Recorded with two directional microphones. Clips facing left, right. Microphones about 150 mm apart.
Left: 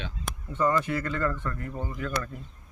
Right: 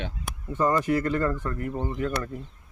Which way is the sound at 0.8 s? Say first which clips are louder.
Right 4 dB; 35° right (ahead or behind).